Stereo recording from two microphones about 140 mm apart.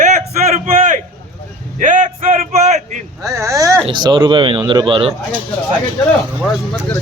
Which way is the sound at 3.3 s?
20° right (ahead or behind).